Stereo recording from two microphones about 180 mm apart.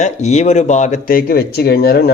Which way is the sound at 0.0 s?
40° left (ahead or behind).